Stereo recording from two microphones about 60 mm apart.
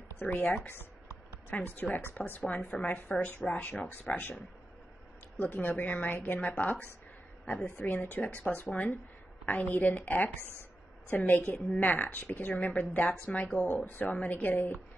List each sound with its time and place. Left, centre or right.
0.2 s a woman's voice: left
5.4 s a woman's voice: left
7.8 s a woman's voice: left